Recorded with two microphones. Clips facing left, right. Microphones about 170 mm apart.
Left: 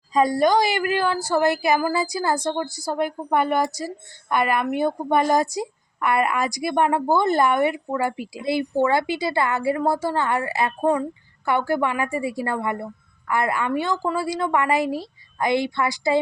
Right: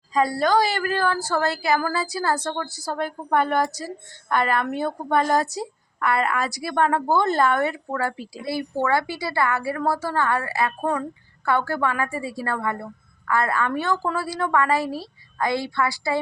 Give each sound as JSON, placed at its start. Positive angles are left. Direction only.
{"t": 0.1, "sound": "a woman's voice", "side_deg": 20}